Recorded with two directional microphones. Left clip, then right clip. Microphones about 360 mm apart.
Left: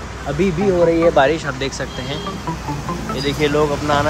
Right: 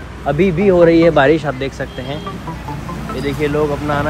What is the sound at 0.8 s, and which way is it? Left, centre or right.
Speech, right.